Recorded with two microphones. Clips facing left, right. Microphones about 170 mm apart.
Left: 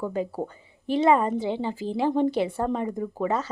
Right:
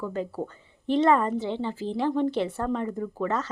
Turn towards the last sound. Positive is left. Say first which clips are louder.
# left 2 dB
turn(degrees=15)  # may be behind; listen again after turning